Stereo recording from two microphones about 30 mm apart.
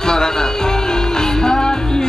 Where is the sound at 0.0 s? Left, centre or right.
Left.